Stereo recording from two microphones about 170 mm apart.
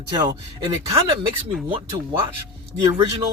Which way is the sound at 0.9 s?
30° right (ahead or behind).